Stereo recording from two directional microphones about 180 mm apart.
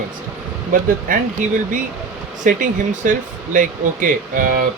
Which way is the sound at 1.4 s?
45° right (ahead or behind).